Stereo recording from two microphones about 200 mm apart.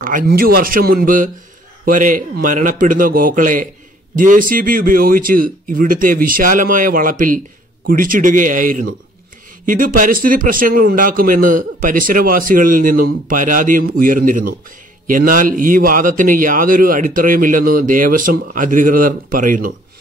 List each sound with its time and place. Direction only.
0.0 s a man's voice: 45° right (ahead or behind)